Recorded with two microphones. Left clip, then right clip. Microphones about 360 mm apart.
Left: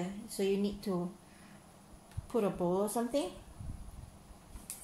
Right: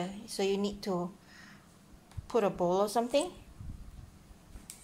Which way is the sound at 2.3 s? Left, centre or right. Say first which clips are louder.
Right 4 dB; right.